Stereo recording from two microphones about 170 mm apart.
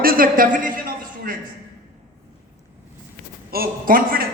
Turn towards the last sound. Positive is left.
turn(degrees=-55)  # may be behind; listen again after turning